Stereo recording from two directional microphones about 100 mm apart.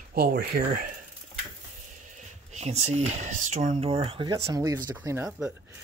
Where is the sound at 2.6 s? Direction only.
90° right.